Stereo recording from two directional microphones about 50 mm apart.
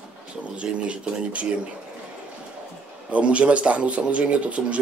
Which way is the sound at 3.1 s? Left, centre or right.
Right.